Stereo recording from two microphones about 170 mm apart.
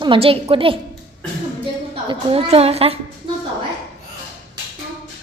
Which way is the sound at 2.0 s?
35° right (ahead or behind).